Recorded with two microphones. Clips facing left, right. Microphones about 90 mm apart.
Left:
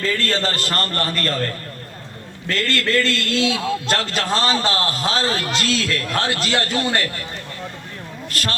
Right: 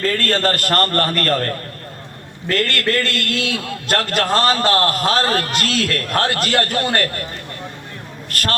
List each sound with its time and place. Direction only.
0.0 s a man's voice: 50° right (ahead or behind)
8.3 s a man's voice: 50° right (ahead or behind)